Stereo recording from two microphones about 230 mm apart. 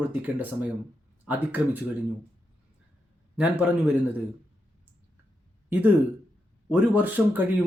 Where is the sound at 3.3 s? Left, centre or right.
Centre.